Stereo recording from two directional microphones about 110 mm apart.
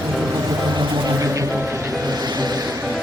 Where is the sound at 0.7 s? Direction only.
30° right (ahead or behind).